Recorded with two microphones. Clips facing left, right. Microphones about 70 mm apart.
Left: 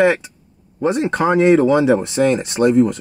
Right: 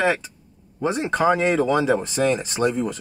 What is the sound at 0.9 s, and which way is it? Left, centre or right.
Speech, left.